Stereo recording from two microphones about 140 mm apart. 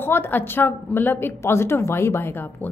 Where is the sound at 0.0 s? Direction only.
15° left (ahead or behind).